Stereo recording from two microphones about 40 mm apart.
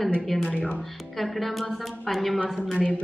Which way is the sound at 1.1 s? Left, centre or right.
Centre.